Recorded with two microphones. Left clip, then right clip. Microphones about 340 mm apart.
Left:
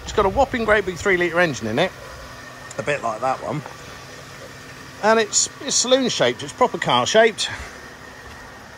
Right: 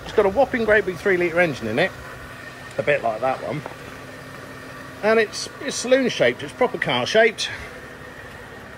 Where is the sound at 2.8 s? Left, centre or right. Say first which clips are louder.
Right 2 dB; centre.